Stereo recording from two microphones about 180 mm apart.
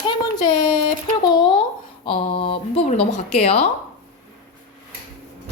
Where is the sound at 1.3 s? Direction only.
25° left (ahead or behind).